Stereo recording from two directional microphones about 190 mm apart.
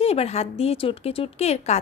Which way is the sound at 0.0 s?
30° left (ahead or behind).